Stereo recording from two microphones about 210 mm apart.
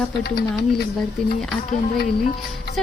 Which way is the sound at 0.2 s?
50° left (ahead or behind).